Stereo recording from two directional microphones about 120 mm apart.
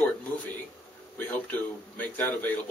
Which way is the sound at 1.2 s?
15° left (ahead or behind).